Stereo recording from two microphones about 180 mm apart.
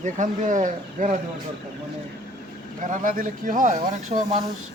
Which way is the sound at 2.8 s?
45° right (ahead or behind).